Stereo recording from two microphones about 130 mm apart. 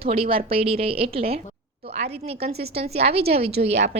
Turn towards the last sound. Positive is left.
turn(degrees=-55)  # may be behind; listen again after turning